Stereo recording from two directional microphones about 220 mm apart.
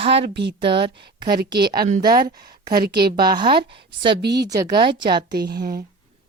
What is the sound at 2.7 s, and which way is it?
Speech, 45° right (ahead or behind).